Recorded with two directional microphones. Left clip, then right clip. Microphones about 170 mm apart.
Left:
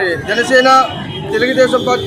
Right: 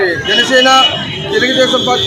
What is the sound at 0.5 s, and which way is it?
A man's voice, 25° left (ahead or behind).